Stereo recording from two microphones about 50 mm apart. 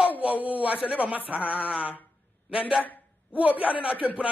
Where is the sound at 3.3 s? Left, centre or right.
Right.